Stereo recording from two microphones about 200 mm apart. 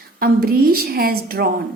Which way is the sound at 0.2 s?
50° right (ahead or behind).